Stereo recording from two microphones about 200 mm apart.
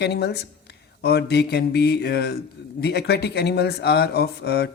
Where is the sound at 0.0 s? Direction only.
55° left (ahead or behind).